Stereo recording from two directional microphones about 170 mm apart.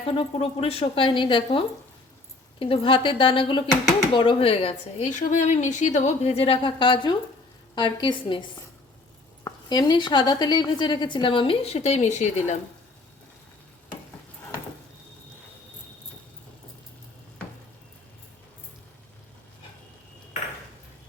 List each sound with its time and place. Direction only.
0.0 s a woman's voice: 30° left (ahead or behind)